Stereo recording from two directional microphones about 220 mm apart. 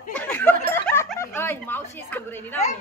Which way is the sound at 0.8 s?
10° left (ahead or behind).